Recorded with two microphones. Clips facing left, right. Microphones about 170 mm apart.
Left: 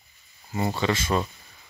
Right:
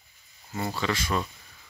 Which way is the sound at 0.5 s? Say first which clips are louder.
Left 4 dB; 20° left (ahead or behind).